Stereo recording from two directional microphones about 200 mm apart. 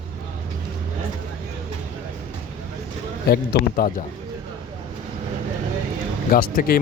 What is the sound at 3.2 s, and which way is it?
Speech, 50° left (ahead or behind).